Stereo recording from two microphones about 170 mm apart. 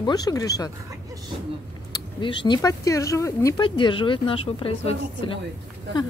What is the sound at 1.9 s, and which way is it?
Speech, 30° left (ahead or behind).